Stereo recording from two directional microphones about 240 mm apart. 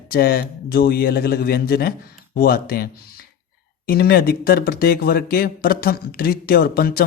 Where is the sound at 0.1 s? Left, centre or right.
Left.